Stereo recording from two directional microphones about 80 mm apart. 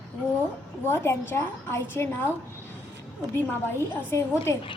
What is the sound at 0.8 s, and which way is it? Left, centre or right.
A woman's voice, left.